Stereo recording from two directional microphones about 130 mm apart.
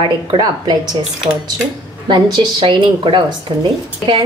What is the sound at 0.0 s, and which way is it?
Speech, 35° right (ahead or behind).